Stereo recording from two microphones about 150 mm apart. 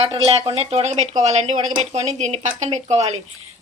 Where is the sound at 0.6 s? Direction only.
45° right (ahead or behind).